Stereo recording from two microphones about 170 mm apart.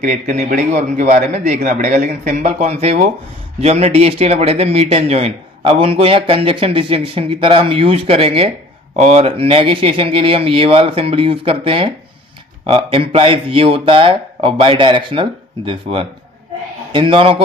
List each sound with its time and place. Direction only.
0.0 s a man's voice: 45° right (ahead or behind)